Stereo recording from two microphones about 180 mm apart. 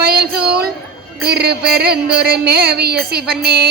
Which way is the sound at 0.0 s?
60° right (ahead or behind).